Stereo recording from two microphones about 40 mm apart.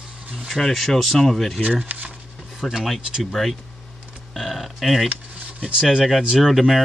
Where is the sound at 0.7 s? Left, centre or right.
Centre.